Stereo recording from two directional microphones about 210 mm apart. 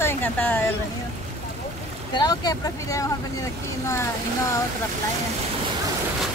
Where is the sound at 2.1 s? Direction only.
20° left (ahead or behind).